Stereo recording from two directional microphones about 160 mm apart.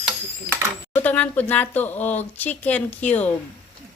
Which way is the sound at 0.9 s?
10° left (ahead or behind).